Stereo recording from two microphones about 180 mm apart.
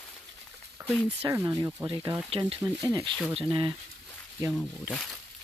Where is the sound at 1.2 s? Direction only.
15° right (ahead or behind).